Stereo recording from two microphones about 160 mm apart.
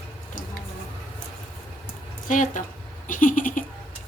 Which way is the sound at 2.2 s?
55° left (ahead or behind).